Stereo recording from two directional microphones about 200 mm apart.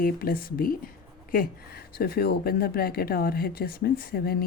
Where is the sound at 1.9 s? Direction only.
50° left (ahead or behind).